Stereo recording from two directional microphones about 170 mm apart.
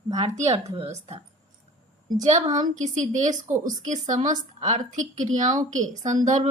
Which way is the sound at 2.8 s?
45° right (ahead or behind).